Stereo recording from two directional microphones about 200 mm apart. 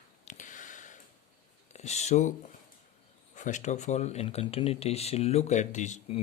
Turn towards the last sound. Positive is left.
turn(degrees=35)  # may be behind; listen again after turning